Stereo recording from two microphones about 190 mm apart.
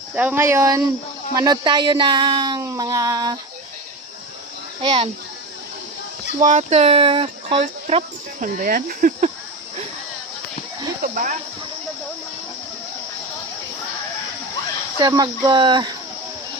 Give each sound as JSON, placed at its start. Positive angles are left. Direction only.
{"t": 0.1, "sound": "speech", "side_deg": -10}
{"t": 4.8, "sound": "speech", "side_deg": -30}
{"t": 6.4, "sound": "speech", "side_deg": -35}
{"t": 11.0, "sound": "speech", "side_deg": -45}
{"t": 14.9, "sound": "speech", "side_deg": -20}